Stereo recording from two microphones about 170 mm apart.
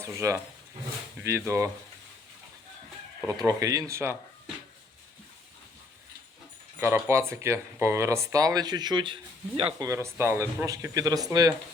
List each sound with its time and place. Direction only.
0.0 s speech: 15° right (ahead or behind)
3.2 s speech: 20° right (ahead or behind)
6.7 s speech: 15° right (ahead or behind); by 9.8 s 35° right (ahead or behind)
9.8 s speech: 15° right (ahead or behind)